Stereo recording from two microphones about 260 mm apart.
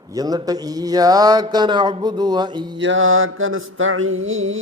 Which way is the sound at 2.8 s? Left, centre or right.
Right.